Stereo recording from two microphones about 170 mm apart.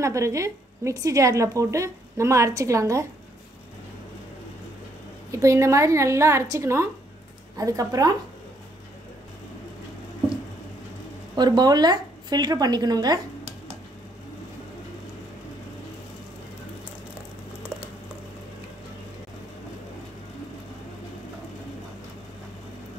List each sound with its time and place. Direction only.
0.0 s a woman's voice: 15° right (ahead or behind)
5.3 s a woman's voice: 15° right (ahead or behind)
11.3 s speech: 25° right (ahead or behind)